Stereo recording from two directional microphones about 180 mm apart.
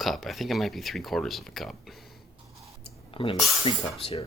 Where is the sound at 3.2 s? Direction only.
30° left (ahead or behind).